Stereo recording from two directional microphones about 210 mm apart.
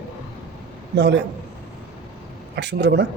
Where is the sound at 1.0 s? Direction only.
55° right (ahead or behind).